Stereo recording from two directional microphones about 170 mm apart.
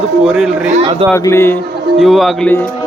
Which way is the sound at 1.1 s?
15° left (ahead or behind).